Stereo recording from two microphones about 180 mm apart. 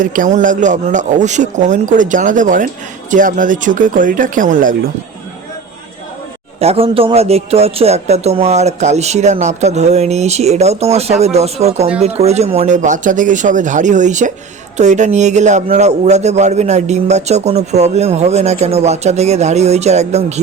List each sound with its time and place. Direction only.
0.0 s a man's voice: 45° right (ahead or behind)
6.6 s a man's voice: 35° right (ahead or behind)